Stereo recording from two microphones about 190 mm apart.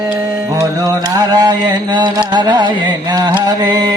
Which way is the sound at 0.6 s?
20° right (ahead or behind).